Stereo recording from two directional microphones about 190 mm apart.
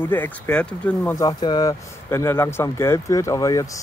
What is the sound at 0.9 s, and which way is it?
Speech, 20° left (ahead or behind).